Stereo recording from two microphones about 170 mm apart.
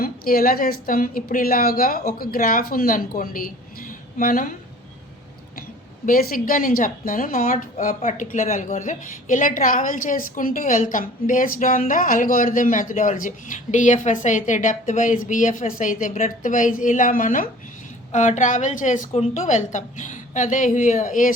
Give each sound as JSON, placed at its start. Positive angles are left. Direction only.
{"t": 0.0, "sound": "a woman's voice", "side_deg": 60}
{"t": 6.1, "sound": "speech", "side_deg": 55}